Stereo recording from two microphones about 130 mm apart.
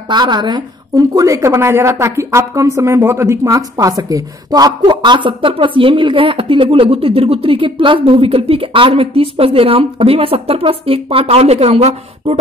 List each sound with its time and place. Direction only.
0.1 s a woman's voice: 35° right (ahead or behind); by 12.4 s 50° right (ahead or behind)